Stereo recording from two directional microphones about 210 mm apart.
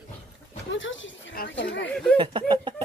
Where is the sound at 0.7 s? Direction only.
65° left (ahead or behind).